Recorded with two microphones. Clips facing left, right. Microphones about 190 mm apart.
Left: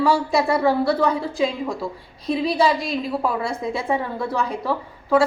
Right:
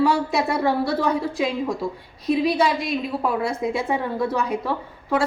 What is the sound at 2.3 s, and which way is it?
Speech, 25° left (ahead or behind).